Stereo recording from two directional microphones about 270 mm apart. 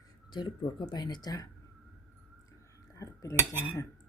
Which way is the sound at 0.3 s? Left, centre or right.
Centre.